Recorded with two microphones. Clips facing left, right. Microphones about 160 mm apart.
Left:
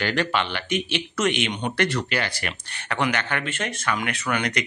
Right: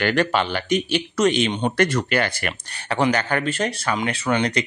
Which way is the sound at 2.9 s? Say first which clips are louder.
Right 5 dB; 35° right (ahead or behind).